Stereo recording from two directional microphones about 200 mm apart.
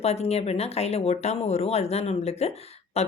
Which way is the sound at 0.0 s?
30° left (ahead or behind).